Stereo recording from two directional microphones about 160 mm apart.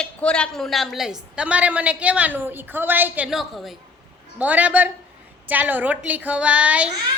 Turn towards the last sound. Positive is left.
turn(degrees=-10)  # may be behind; listen again after turning